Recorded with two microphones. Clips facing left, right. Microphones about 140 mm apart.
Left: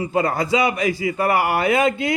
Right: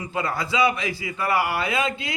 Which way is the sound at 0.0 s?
35° left (ahead or behind).